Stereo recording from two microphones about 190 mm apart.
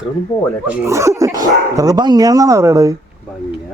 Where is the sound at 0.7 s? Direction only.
10° right (ahead or behind).